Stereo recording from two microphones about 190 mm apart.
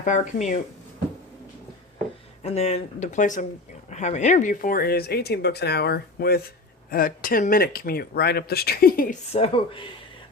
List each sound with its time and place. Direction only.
0.0 s speech: 40° left (ahead or behind)
2.4 s speech: 35° left (ahead or behind); by 9.1 s 50° left (ahead or behind)
9.3 s speech: 30° left (ahead or behind)